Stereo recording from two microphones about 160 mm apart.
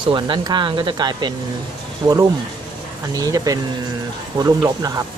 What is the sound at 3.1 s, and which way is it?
Speech, 25° right (ahead or behind).